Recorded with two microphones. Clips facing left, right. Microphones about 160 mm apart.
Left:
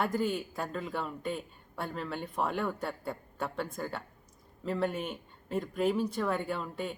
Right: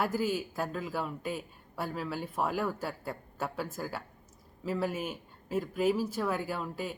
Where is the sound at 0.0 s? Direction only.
5° right (ahead or behind).